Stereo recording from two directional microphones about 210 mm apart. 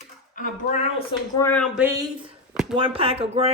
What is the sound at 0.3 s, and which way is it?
Speech, 35° left (ahead or behind).